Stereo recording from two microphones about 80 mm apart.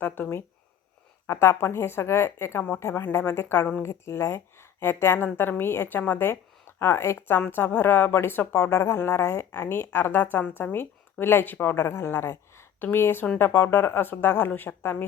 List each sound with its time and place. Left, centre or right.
0.0 s a woman's voice: left